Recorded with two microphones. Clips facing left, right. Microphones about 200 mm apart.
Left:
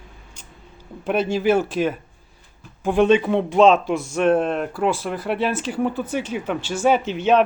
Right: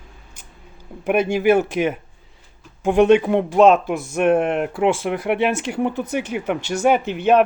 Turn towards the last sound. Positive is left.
turn(degrees=-10)  # may be behind; listen again after turning